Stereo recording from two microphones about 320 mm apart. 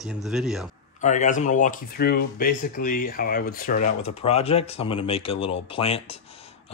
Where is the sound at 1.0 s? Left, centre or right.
Left.